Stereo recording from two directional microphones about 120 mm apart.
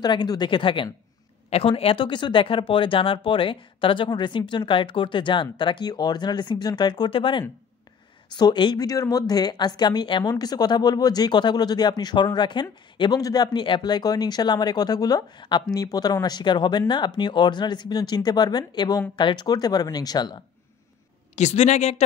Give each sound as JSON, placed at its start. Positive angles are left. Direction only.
{"t": 0.0, "sound": "speech", "side_deg": 35}
{"t": 1.5, "sound": "speech", "side_deg": 55}
{"t": 21.4, "sound": "a man's voice", "side_deg": 70}